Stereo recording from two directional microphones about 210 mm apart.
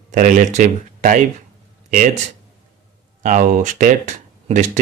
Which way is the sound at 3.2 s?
35° right (ahead or behind).